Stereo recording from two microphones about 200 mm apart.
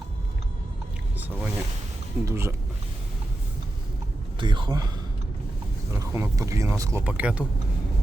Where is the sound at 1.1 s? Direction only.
10° right (ahead or behind).